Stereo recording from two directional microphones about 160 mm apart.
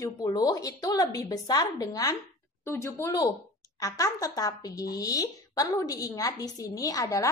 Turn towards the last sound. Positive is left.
turn(degrees=20)  # may be behind; listen again after turning